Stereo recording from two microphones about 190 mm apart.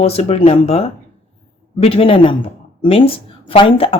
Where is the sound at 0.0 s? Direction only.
30° left (ahead or behind).